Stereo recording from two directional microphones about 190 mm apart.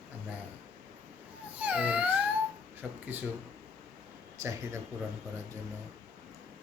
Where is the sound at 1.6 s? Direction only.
5° right (ahead or behind).